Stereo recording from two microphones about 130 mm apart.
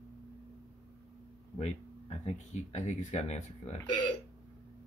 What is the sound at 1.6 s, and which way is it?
Speech, 55° left (ahead or behind).